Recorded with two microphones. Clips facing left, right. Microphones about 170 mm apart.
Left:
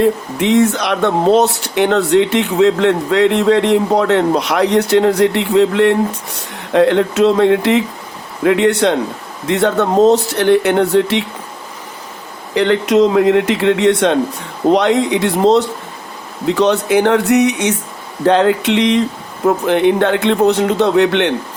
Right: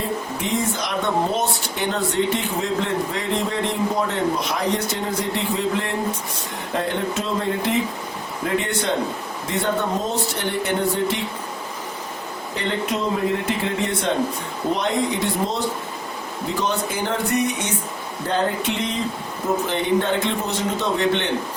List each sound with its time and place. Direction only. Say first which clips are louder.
0.0 s a man's voice: left 11 dB; 75° left (ahead or behind)
12.5 s a man's voice: left 13 dB; 85° left
18.3 s a man's voice: left 11 dB; 90° left
19.6 s speech: left 9 dB; 65° left (ahead or behind)